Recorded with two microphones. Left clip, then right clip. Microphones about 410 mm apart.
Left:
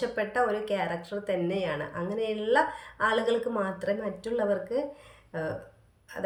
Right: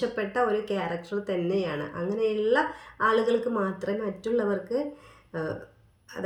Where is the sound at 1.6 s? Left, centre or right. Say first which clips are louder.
Right 1 dB; centre.